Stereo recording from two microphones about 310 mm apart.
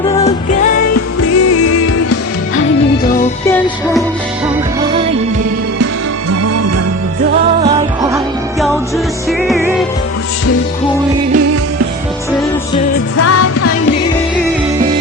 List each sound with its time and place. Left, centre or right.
0.9 s music: left
6.4 s music: right
9.5 s music: centre
13.1 s music: left